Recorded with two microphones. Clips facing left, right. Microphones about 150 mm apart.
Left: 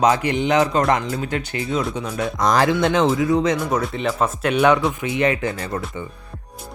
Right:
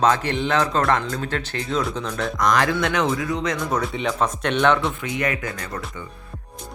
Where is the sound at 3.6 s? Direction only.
10° left (ahead or behind).